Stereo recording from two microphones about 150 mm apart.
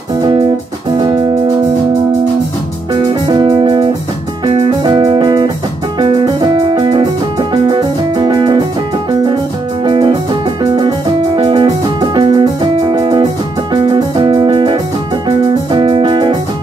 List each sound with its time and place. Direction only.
2.9 s music: 30° right (ahead or behind)
9.8 s music: 30° right (ahead or behind)
11.3 s music: 35° right (ahead or behind)